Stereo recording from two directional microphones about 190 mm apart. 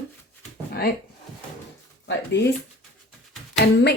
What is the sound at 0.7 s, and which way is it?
Speech, 55° left (ahead or behind).